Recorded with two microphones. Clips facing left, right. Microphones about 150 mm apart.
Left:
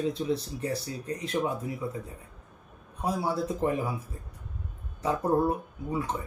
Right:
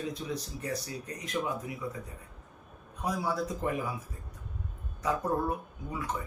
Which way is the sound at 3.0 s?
30° left (ahead or behind).